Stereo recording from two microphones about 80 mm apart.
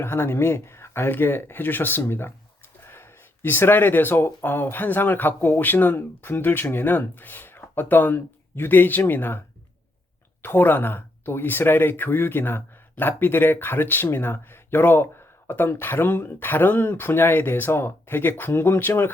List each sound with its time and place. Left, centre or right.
0.0 s speech: left
10.4 s speech: left